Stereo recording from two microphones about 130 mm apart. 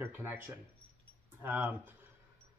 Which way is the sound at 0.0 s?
15° right (ahead or behind).